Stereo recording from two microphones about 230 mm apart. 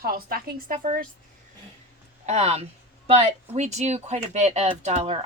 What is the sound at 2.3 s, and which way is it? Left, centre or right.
A woman's voice, right.